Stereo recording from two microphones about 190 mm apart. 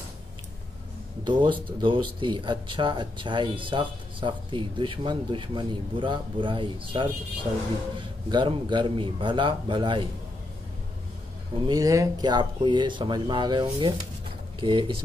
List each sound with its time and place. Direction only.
1.2 s speech: 25° right (ahead or behind)
11.5 s speech: 20° right (ahead or behind)